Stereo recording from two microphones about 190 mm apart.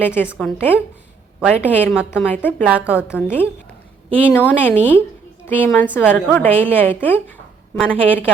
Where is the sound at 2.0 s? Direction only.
5° right (ahead or behind).